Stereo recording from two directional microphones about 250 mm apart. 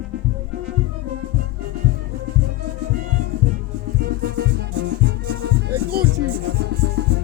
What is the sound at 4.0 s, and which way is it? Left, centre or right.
Music, right.